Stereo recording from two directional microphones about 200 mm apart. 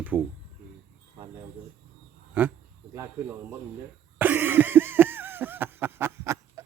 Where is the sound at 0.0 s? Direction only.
10° right (ahead or behind).